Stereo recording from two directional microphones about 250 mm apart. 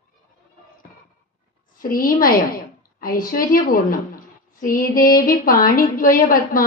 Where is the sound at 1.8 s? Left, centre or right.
Left.